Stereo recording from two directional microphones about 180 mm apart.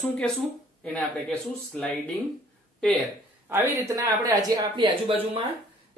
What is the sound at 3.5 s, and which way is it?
Speech, 20° right (ahead or behind).